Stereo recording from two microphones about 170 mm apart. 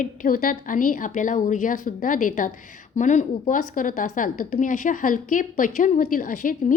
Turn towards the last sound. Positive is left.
turn(degrees=55)  # may be behind; listen again after turning